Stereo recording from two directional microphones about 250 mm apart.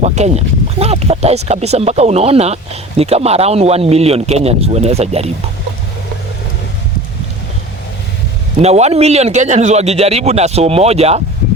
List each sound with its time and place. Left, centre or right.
0.0 s a man's voice: right
8.6 s a man's voice: right